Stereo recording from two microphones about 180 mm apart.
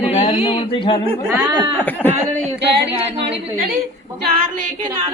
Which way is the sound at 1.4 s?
25° right (ahead or behind).